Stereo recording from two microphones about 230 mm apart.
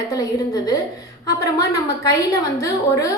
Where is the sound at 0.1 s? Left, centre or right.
Centre.